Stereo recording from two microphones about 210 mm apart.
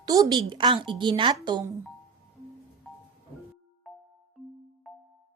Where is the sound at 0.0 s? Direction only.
15° right (ahead or behind).